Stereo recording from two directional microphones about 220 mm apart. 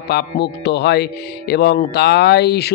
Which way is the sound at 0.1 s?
50° left (ahead or behind).